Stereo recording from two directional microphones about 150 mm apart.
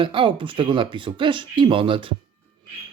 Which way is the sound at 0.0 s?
35° right (ahead or behind).